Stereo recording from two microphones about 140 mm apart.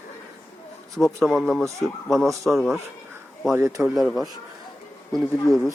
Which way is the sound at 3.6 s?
20° right (ahead or behind).